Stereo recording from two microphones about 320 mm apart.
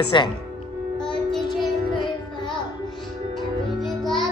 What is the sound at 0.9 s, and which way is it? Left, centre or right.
Music, centre.